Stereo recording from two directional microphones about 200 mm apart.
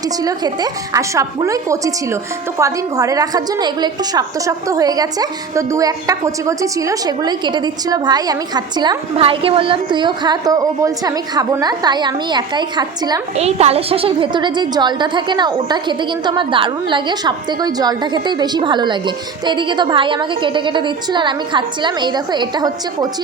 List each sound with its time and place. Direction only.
0.2 s a woman's voice: 20° right (ahead or behind)
13.3 s a woman's voice: 30° right (ahead or behind)